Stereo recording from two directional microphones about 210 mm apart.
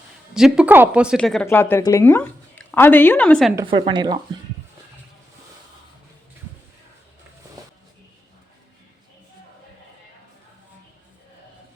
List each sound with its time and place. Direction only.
0.3 s speech: 5° right (ahead or behind)
3.7 s speech: 25° right (ahead or behind)